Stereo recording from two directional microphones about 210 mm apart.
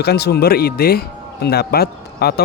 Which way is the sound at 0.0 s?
50° left (ahead or behind).